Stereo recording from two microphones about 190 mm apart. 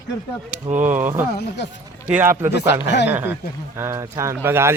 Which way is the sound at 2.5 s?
65° left (ahead or behind).